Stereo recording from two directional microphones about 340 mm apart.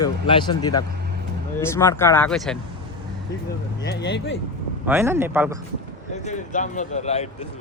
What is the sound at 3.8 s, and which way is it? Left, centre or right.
Speech, left.